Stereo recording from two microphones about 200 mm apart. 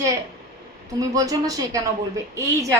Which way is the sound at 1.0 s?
20° right (ahead or behind).